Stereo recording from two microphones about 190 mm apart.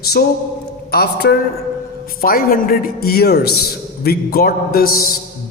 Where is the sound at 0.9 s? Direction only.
55° left (ahead or behind).